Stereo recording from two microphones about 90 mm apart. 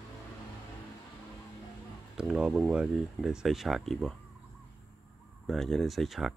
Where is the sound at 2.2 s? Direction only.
5° right (ahead or behind).